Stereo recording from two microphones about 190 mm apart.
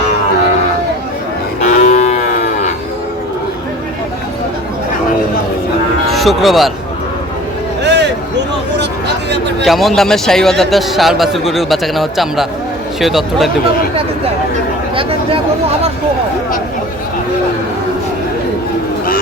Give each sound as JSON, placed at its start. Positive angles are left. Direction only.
{"t": 1.6, "sound": "livestock", "side_deg": 40}
{"t": 6.1, "sound": "speech", "side_deg": 0}
{"t": 7.9, "sound": "a sound", "side_deg": -65}
{"t": 9.6, "sound": "a man's voice", "side_deg": 0}